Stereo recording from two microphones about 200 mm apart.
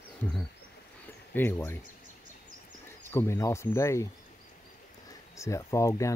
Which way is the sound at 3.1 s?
10° left (ahead or behind).